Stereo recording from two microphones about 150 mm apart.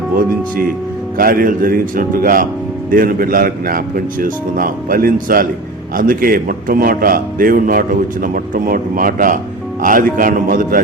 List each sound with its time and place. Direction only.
1.2 s a man's voice: 70° right (ahead or behind)